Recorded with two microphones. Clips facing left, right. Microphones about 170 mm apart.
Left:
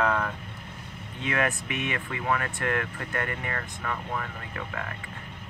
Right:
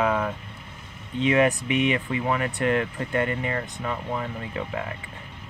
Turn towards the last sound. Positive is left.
turn(degrees=-20)  # may be behind; listen again after turning